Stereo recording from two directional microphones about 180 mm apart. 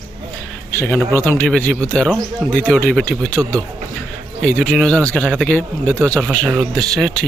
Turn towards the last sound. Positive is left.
turn(degrees=5)  # may be behind; listen again after turning